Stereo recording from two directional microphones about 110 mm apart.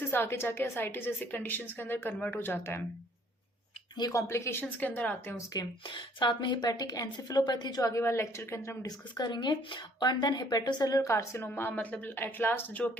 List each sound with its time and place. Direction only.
0.1 s a woman's voice: 20° left (ahead or behind)
3.9 s speech: 40° left (ahead or behind)
4.2 s a woman's voice: 25° left (ahead or behind)
5.5 s a woman's voice: 45° left (ahead or behind); by 12.9 s 15° left (ahead or behind)